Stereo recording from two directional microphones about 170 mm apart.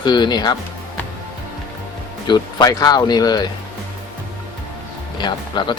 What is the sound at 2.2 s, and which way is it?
Speech, 25° left (ahead or behind).